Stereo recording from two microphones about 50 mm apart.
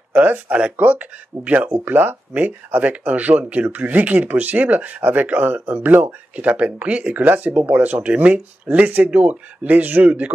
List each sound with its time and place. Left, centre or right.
0.1 s speech: right
0.5 s speech: right
1.7 s speech: right
6.3 s speech: right